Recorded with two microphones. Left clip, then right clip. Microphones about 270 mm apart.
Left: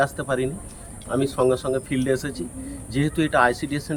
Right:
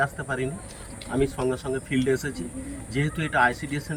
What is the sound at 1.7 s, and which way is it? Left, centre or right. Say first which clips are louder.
A man's voice: left 2 dB; centre.